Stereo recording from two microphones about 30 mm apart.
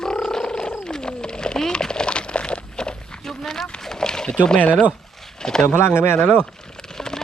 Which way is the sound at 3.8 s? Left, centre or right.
Left.